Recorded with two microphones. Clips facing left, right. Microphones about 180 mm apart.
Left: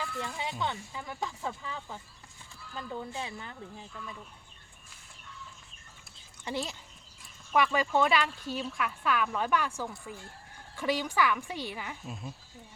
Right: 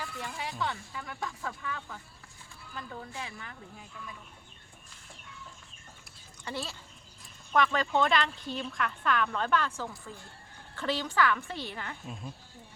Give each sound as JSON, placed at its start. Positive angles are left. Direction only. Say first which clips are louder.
{"t": 0.2, "sound": "speech", "louder": "even", "side_deg": 20}
{"t": 6.4, "sound": "a woman's voice", "louder": "left 3 dB", "side_deg": 15}